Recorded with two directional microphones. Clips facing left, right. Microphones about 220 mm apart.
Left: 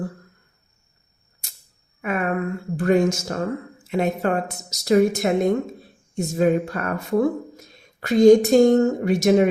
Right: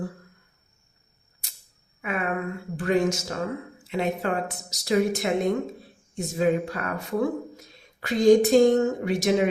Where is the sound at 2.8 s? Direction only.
45° left (ahead or behind).